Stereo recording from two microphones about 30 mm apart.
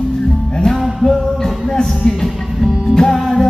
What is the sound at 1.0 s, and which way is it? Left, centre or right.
Music, centre.